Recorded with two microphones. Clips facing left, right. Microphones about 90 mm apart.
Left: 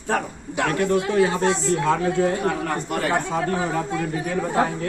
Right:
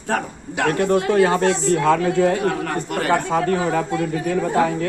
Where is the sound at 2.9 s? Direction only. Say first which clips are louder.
Right 5 dB; 70° right (ahead or behind).